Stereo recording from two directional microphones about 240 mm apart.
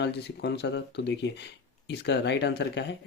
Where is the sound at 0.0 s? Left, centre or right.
Left.